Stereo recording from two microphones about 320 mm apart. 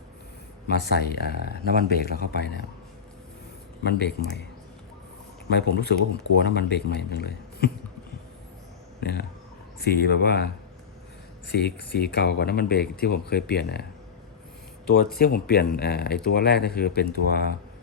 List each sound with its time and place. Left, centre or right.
0.7 s speech: left
3.8 s speech: left
5.5 s speech: left
9.0 s speech: left
15.2 s speech: left